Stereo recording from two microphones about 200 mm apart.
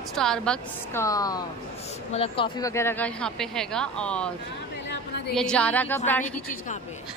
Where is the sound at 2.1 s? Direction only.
30° left (ahead or behind).